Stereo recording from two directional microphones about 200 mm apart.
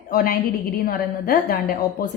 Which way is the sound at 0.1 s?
45° left (ahead or behind).